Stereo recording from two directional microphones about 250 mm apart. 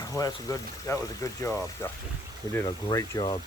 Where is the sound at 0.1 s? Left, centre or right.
Centre.